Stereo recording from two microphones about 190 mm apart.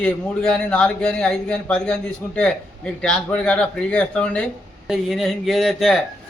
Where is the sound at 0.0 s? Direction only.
5° left (ahead or behind).